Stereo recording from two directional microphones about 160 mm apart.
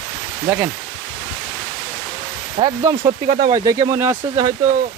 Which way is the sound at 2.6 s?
40° right (ahead or behind).